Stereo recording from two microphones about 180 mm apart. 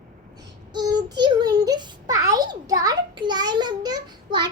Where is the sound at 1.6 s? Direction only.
20° right (ahead or behind).